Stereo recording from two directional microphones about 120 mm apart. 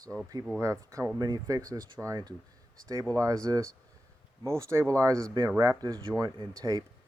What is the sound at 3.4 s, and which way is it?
Speech, 30° right (ahead or behind).